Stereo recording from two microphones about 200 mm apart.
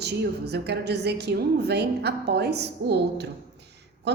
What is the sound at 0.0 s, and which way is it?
A woman's voice, 55° right (ahead or behind).